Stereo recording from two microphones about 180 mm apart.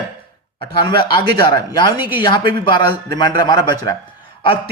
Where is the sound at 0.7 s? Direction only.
25° left (ahead or behind).